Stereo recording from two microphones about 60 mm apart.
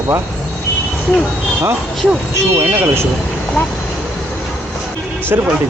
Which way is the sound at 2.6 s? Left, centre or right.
Right.